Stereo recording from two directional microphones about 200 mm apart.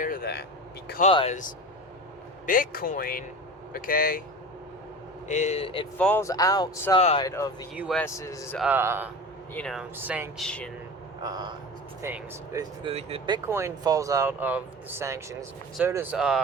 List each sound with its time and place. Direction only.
0.0 s vehicle: 45° left (ahead or behind)
1.0 s a man's voice: 30° left (ahead or behind)
5.3 s a man's voice: 35° left (ahead or behind)
6.0 s speech: 10° left (ahead or behind)
7.8 s speech: centre (ahead or behind)
8.0 s speech: 15° left (ahead or behind)
8.5 s speech: 5° right (ahead or behind)
9.6 s speech: 5° left (ahead or behind)
9.9 s speech: 10° right (ahead or behind)
10.4 s speech: 5° left (ahead or behind)
11.2 s speech: 20° right (ahead or behind)
12.8 s speech: 30° right (ahead or behind)
13.5 s speech: 15° right (ahead or behind)